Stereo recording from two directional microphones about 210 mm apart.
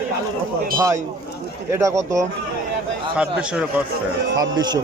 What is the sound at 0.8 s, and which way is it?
A man's voice, 15° right (ahead or behind).